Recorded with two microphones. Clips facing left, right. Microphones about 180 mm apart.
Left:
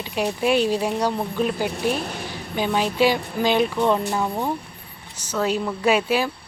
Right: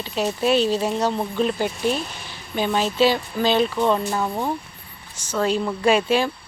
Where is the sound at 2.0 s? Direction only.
65° left (ahead or behind).